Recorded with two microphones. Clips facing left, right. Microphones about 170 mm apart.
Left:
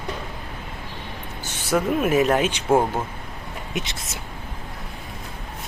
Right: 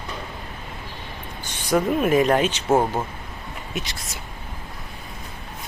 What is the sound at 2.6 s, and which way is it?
Speech, 10° right (ahead or behind).